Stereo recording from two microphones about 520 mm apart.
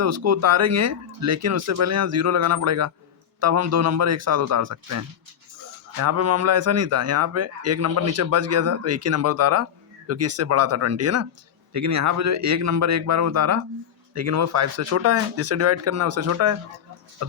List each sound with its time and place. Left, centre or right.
0.0 s a man's voice: right